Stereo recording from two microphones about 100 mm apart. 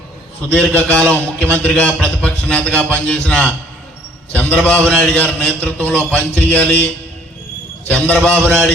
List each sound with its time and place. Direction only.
0.8 s a man's voice: 10° left (ahead or behind)
7.9 s a man's voice: 15° left (ahead or behind)